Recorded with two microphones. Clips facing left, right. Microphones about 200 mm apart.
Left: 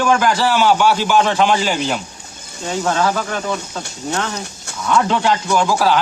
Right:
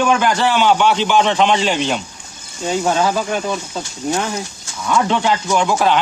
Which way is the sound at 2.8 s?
20° right (ahead or behind).